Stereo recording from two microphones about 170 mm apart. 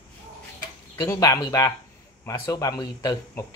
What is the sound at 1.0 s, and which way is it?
Speech, 20° left (ahead or behind).